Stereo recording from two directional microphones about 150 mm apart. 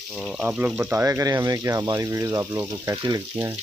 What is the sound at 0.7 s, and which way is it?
Speech, 15° right (ahead or behind).